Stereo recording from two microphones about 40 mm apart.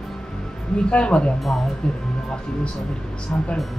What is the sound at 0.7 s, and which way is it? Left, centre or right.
Speech, left.